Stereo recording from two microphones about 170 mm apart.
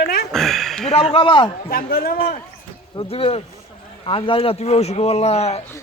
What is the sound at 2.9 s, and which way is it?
Speech, 35° left (ahead or behind).